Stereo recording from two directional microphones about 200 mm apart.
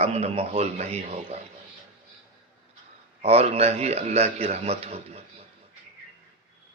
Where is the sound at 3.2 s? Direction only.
30° right (ahead or behind).